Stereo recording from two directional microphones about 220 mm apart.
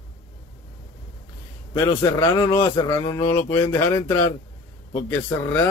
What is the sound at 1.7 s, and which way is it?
Speech, 15° left (ahead or behind).